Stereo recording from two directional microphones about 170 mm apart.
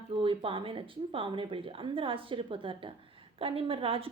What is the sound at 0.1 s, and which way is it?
A woman's voice, 30° right (ahead or behind).